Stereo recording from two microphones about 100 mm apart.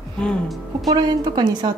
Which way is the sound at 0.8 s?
45° right (ahead or behind).